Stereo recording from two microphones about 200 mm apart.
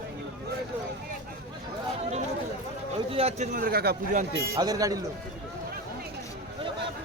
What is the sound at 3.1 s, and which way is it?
A man's voice, 30° right (ahead or behind).